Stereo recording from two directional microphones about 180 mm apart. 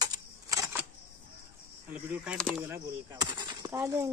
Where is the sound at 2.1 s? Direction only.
5° right (ahead or behind).